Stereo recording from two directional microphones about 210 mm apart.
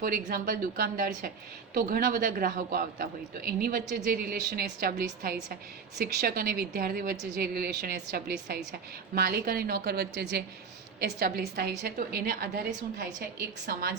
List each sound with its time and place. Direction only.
0.3 s a man's voice: 45° right (ahead or behind)